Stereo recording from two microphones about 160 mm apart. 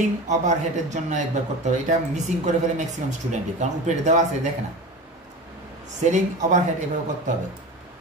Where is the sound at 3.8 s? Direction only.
50° right (ahead or behind).